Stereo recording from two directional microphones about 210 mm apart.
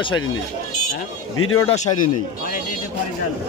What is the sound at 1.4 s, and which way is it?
Speech, 80° left.